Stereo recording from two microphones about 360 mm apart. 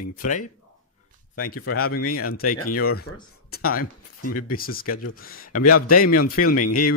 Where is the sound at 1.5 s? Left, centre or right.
Left.